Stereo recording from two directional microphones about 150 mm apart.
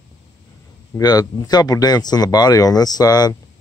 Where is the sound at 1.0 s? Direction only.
25° left (ahead or behind).